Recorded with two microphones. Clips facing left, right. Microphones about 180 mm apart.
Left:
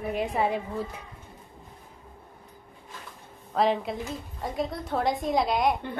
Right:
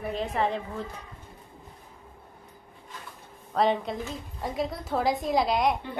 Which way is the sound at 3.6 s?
Centre (ahead or behind).